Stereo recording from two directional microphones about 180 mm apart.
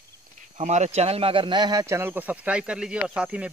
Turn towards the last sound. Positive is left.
turn(degrees=-5)  # may be behind; listen again after turning